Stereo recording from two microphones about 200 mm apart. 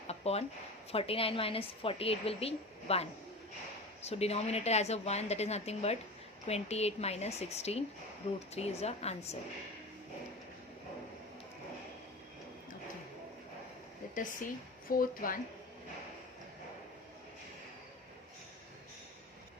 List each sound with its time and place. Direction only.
0.1 s a sound: 30° left (ahead or behind)
0.9 s a woman's voice: 30° left (ahead or behind)
14.8 s a woman's voice: 45° left (ahead or behind)